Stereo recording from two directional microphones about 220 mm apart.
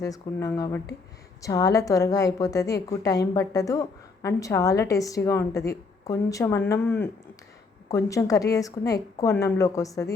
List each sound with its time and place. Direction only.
0.0 s a woman's voice: 15° left (ahead or behind)